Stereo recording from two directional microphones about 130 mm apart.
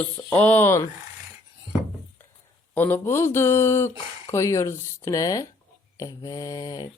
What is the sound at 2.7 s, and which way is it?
Speech, 15° left (ahead or behind).